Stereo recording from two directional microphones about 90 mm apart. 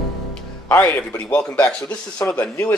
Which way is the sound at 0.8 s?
20° left (ahead or behind).